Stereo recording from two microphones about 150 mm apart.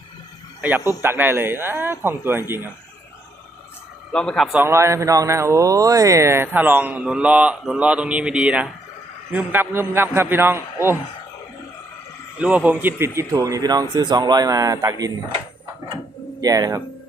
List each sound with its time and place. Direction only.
1.0 s speech: 15° right (ahead or behind)
4.1 s speech: 5° left (ahead or behind)
4.5 s speech: 15° right (ahead or behind)
12.4 s speech: 10° right (ahead or behind); by 15.1 s 25° right (ahead or behind)
16.4 s speech: 25° right (ahead or behind)